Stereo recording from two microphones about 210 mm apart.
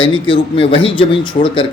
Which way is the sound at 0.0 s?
25° left (ahead or behind).